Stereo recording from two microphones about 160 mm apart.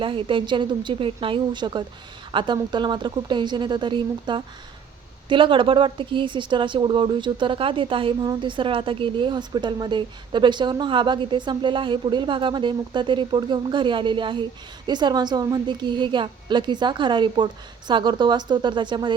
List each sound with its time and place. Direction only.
0.0 s a woman's voice: 35° right (ahead or behind)